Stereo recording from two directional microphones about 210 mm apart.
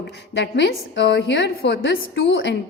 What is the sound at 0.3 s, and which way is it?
A woman's voice, 55° left (ahead or behind).